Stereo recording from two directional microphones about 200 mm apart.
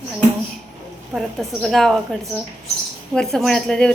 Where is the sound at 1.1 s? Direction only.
Centre (ahead or behind).